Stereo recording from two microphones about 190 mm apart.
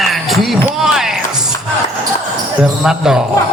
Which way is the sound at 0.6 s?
Centre (ahead or behind).